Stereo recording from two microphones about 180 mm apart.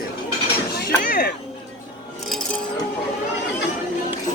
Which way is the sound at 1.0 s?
50° left (ahead or behind).